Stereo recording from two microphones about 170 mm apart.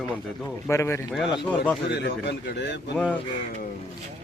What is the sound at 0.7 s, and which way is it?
Speech, 15° left (ahead or behind).